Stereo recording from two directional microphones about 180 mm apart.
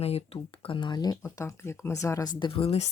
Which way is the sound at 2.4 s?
30° left (ahead or behind).